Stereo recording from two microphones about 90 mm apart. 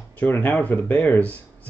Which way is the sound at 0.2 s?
20° left (ahead or behind).